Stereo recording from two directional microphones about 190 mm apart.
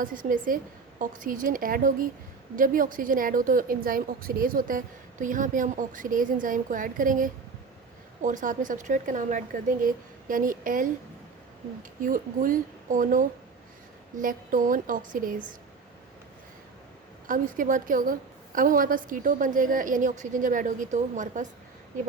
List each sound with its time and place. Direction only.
0.0 s a woman's voice: 45° right (ahead or behind)
17.2 s a woman's voice: 45° right (ahead or behind)